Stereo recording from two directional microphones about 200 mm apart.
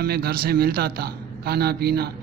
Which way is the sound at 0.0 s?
50° right (ahead or behind).